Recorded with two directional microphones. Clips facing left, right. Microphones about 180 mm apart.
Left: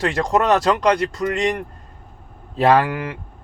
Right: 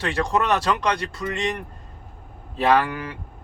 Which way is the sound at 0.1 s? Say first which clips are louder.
Left 1 dB; 40° left (ahead or behind).